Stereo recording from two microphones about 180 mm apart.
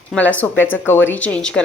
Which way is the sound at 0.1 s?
10° left (ahead or behind).